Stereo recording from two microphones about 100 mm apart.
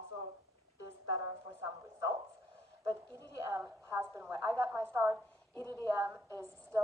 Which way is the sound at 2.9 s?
35° right (ahead or behind).